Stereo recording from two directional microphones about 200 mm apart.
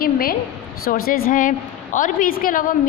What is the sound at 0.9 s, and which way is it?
A woman's voice, 45° left (ahead or behind).